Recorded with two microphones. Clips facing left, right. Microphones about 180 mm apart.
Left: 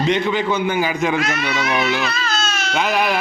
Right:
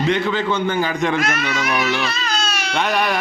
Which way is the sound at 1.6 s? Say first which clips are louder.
Left 1 dB; 20° left (ahead or behind).